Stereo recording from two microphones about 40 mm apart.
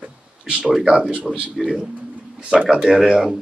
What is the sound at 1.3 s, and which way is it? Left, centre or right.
Speech, right.